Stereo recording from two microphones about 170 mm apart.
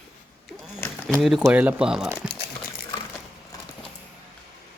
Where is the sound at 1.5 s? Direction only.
5° right (ahead or behind).